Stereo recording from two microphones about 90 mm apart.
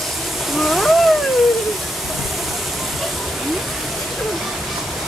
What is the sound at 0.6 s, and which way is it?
Speech, centre (ahead or behind).